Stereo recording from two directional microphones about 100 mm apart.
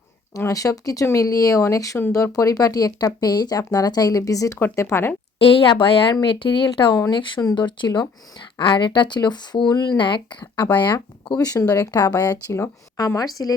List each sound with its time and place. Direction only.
0.3 s speech: 35° left (ahead or behind)
5.4 s speech: 60° left (ahead or behind)
11.3 s speech: 35° left (ahead or behind)